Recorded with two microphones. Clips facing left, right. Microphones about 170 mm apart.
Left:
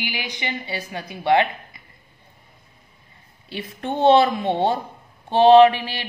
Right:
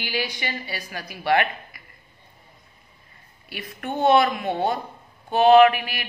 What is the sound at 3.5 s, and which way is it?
Speech, 25° left (ahead or behind).